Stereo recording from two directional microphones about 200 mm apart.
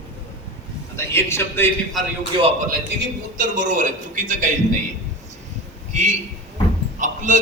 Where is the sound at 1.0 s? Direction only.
15° left (ahead or behind).